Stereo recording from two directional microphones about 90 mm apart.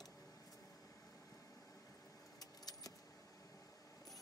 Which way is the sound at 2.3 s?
45° left (ahead or behind).